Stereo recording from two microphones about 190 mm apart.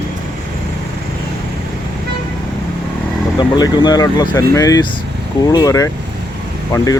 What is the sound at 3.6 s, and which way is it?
Speech, 20° left (ahead or behind).